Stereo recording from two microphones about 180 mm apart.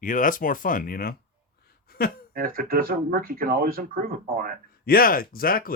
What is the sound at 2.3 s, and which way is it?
Speech, 55° right (ahead or behind).